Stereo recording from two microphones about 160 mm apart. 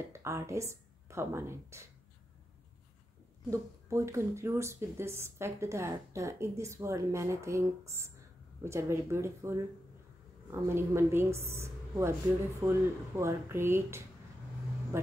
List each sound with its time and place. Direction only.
0.1 s a woman's voice: 20° right (ahead or behind)
3.4 s speech: 20° right (ahead or behind)